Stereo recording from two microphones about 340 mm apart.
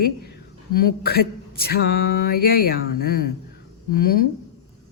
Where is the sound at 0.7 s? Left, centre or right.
Left.